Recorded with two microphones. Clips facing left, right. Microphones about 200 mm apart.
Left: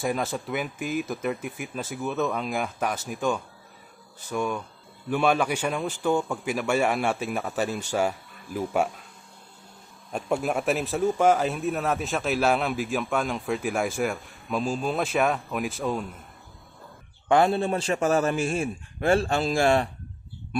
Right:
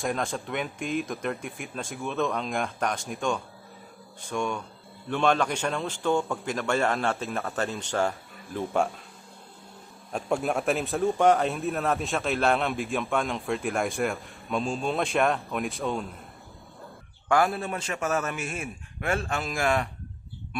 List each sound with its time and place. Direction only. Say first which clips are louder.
0.0 s a man's voice: left 2 dB; 5° left (ahead or behind)
10.1 s a man's voice: left 1 dB; centre (ahead or behind)
17.3 s a man's voice: left 4 dB; 25° left (ahead or behind)